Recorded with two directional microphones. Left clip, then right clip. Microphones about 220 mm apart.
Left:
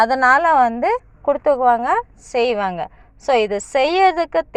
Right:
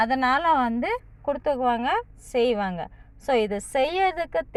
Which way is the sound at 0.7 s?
5° left (ahead or behind).